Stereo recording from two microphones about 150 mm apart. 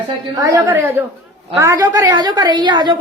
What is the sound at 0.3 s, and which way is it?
A woman's voice, 20° right (ahead or behind).